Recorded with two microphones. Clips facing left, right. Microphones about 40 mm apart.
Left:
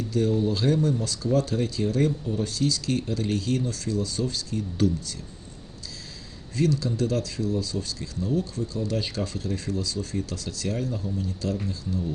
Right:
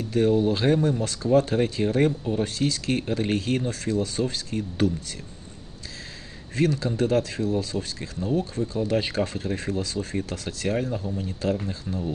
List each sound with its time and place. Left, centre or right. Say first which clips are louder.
0.0 s speech: right 3 dB; right
6.6 s speech: right 1 dB; right